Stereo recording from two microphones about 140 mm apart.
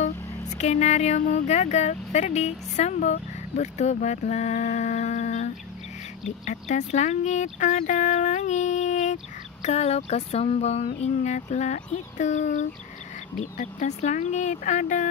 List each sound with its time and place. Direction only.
0.6 s speech: 55° left (ahead or behind)